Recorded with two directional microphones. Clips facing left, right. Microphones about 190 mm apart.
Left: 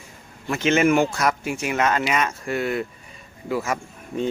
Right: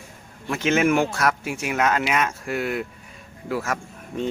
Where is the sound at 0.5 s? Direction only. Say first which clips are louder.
Left 1 dB; centre (ahead or behind).